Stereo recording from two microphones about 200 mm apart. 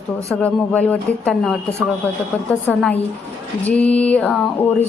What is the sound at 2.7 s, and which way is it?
A woman's voice, 5° left (ahead or behind).